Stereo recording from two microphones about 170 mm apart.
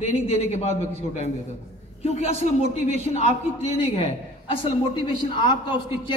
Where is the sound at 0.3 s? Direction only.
40° left (ahead or behind).